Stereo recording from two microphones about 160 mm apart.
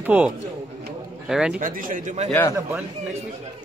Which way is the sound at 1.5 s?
60° right (ahead or behind).